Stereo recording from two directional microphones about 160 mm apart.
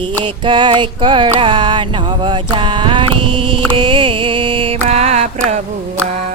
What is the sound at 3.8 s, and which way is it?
Music, 30° right (ahead or behind).